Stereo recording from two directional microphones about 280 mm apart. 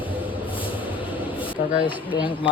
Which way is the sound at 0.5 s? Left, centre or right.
Centre.